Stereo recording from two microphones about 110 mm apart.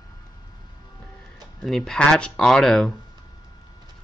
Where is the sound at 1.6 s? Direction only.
Centre (ahead or behind).